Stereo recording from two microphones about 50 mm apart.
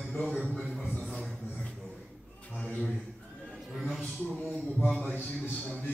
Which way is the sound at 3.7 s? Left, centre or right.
Centre.